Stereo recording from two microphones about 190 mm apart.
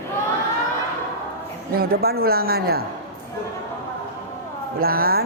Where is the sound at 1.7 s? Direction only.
55° right (ahead or behind).